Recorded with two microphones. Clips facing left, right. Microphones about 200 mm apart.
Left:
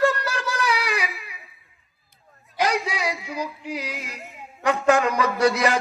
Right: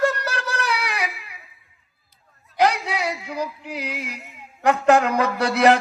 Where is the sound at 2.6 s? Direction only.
65° right (ahead or behind).